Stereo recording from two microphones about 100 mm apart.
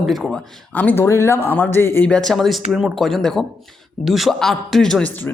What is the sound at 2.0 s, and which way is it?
Speech, 5° left (ahead or behind).